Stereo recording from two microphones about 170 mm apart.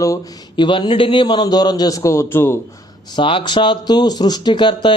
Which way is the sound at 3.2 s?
30° left (ahead or behind).